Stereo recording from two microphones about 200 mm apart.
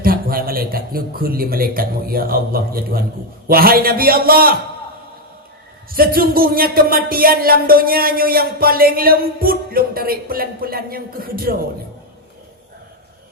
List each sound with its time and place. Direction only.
0.0 s speech: 45° right (ahead or behind)
5.9 s speech: 45° right (ahead or behind)